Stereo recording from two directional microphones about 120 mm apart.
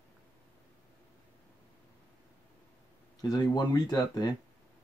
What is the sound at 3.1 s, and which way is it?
Speech, 35° left (ahead or behind).